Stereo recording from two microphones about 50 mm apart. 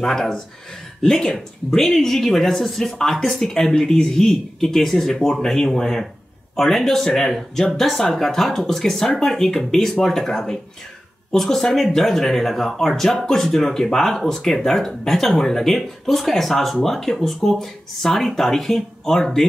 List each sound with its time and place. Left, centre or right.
0.0 s speech: centre